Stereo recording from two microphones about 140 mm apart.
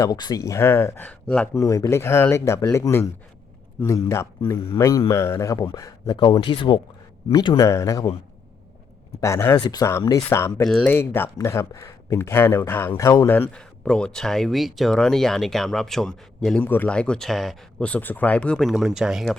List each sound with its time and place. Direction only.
0.0 s speech: 25° left (ahead or behind); by 1.5 s 10° left (ahead or behind)
1.5 s speech: 20° left (ahead or behind)
6.1 s speech: 35° left (ahead or behind)
9.2 s speech: 20° left (ahead or behind); by 19.4 s centre (ahead or behind)